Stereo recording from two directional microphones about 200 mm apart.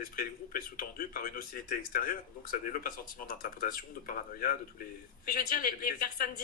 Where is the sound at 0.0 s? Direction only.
45° left (ahead or behind).